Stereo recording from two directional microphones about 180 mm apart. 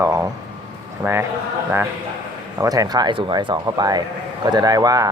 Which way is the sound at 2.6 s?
20° right (ahead or behind).